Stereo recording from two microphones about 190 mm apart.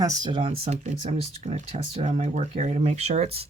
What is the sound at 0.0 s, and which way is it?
Speech, 20° right (ahead or behind).